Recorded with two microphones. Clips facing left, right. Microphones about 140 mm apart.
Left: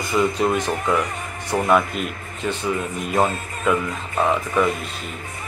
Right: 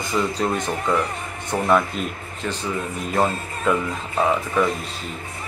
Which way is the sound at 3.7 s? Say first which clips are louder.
Left 1 dB; 5° left (ahead or behind).